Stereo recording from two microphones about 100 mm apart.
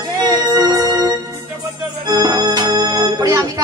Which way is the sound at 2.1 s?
45° right (ahead or behind).